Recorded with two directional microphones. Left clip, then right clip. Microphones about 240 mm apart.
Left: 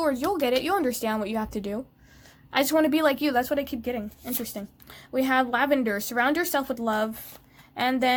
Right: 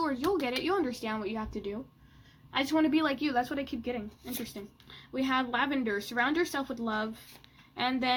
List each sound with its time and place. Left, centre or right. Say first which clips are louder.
0.0 s a woman's voice: left 5 dB; left